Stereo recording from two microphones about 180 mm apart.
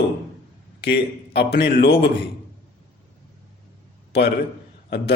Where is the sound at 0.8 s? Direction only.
65° left (ahead or behind).